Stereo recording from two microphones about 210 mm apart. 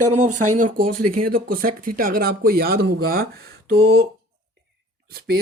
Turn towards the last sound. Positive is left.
turn(degrees=-45)  # may be behind; listen again after turning